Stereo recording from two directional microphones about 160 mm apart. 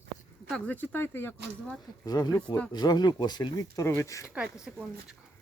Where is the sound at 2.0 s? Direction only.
25° left (ahead or behind).